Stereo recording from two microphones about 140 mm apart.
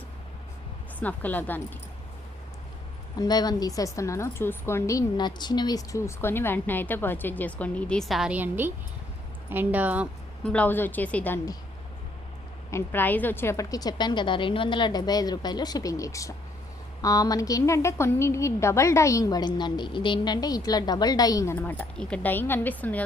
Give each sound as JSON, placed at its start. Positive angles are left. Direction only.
{"t": 0.9, "sound": "a woman's voice", "side_deg": 10}
{"t": 3.2, "sound": "a woman's voice", "side_deg": 30}
{"t": 10.4, "sound": "a woman's voice", "side_deg": 10}
{"t": 12.7, "sound": "a woman's voice", "side_deg": 15}